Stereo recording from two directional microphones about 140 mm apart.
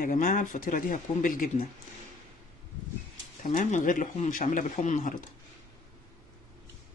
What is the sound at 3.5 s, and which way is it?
Speech, 65° left (ahead or behind).